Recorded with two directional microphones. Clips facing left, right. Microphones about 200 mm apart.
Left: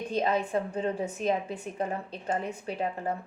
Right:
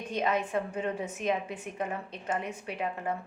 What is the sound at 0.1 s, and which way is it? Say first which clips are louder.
A woman's voice: left 2 dB; 35° left (ahead or behind).